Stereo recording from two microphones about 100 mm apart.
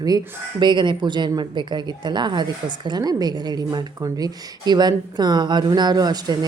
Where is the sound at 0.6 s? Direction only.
50° right (ahead or behind).